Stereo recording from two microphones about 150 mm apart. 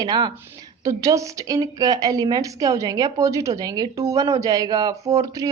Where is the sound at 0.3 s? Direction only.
15° right (ahead or behind).